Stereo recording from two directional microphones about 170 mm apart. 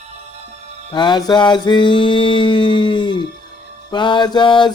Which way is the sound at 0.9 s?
25° left (ahead or behind).